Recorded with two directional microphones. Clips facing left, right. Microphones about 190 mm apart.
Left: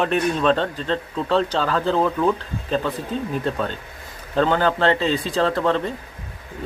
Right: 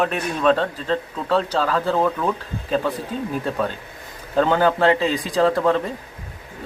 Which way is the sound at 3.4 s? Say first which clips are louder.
Even; 5° right (ahead or behind).